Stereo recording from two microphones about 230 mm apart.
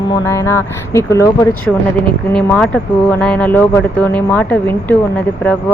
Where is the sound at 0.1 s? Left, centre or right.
Centre.